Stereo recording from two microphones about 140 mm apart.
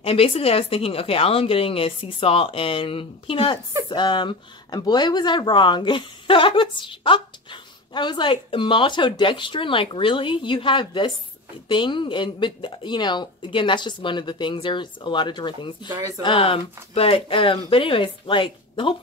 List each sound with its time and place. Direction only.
0.0 s a woman's voice: 45° left (ahead or behind)